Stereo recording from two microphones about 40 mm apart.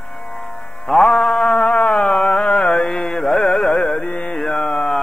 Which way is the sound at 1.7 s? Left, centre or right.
Left.